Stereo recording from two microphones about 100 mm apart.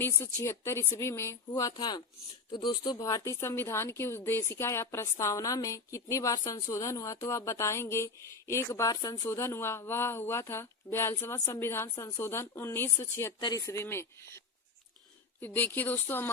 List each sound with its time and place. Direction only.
0.0 s a woman's voice: 30° left (ahead or behind)
9.3 s a woman's voice: 25° left (ahead or behind)